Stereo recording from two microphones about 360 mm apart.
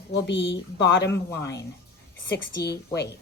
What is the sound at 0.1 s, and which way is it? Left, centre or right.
Speech, left.